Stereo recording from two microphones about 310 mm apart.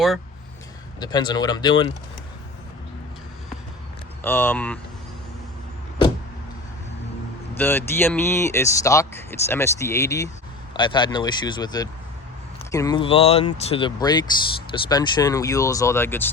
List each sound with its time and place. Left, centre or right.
0.9 s speech: centre
4.2 s speech: centre
7.5 s speech: centre